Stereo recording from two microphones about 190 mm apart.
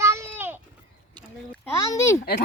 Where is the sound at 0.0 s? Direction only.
15° right (ahead or behind).